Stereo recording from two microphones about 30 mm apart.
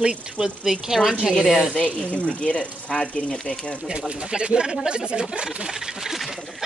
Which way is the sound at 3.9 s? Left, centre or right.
Right.